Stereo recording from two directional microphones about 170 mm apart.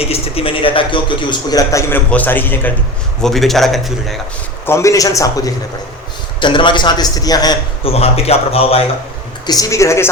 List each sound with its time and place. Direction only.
0.1 s a man's voice: 35° left (ahead or behind); by 4.2 s centre (ahead or behind)
4.6 s a man's voice: 15° left (ahead or behind)
7.9 s a man's voice: 35° left (ahead or behind)
9.5 s a man's voice: 20° left (ahead or behind)